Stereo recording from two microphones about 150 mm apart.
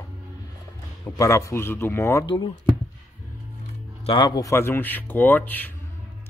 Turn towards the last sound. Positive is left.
turn(degrees=10)  # may be behind; listen again after turning